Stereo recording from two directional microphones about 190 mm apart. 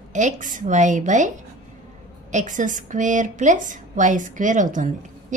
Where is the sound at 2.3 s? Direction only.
40° right (ahead or behind).